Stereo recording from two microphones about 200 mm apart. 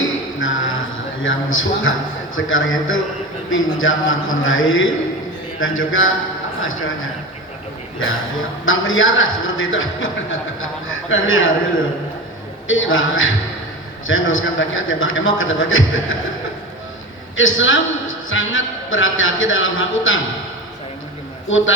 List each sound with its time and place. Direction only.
0.0 s a sound: 75° left (ahead or behind)
1.2 s a man's voice: 80° left
8.6 s a man's voice: 80° left
11.1 s a man's voice: 80° left
12.6 s a man's voice: 80° left
17.3 s a man's voice: 75° left (ahead or behind)